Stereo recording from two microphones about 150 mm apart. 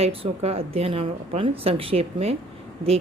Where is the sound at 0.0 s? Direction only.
40° right (ahead or behind).